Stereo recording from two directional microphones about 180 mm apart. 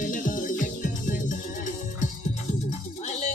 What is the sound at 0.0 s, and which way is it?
Music, 45° left (ahead or behind).